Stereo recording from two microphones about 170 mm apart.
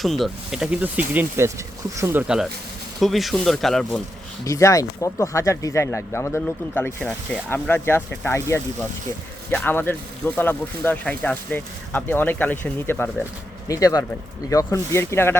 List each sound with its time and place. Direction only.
0.0 s speech: centre (ahead or behind)
4.4 s speech: 20° left (ahead or behind)
13.7 s speech: 20° left (ahead or behind)